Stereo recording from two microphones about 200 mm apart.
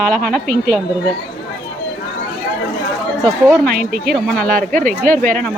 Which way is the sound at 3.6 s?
45° right (ahead or behind).